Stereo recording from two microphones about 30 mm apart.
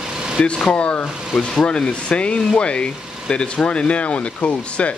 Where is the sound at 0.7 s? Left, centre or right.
Left.